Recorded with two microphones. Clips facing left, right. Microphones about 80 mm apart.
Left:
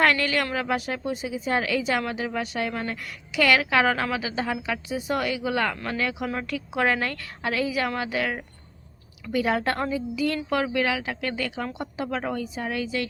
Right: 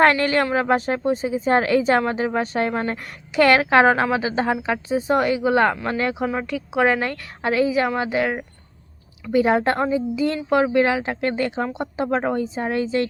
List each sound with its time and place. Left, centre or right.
0.0 s a woman's voice: right
6.2 s a woman's voice: centre; by 13.1 s right